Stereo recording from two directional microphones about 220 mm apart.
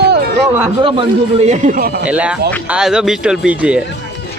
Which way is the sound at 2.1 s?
5° right (ahead or behind).